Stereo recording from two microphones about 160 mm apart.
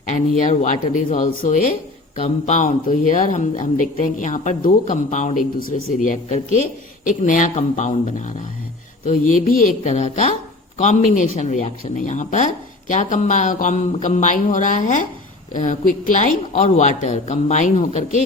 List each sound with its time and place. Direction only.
0.1 s speech: 50° left (ahead or behind)
2.1 s speech: 45° left (ahead or behind)